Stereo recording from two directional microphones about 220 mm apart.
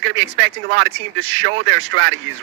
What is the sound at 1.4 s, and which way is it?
Speech, 60° right (ahead or behind).